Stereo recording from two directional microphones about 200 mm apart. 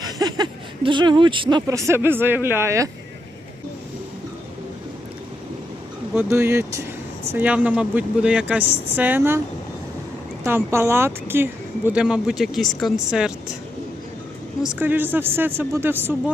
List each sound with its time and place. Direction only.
0.0 s speech: 20° right (ahead or behind)
6.1 s speech: 15° right (ahead or behind)
10.4 s speech: 15° right (ahead or behind)
14.8 s speech: 10° right (ahead or behind)